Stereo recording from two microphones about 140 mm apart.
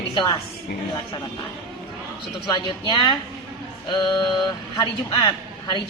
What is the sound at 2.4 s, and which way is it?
A man's voice, 30° left (ahead or behind).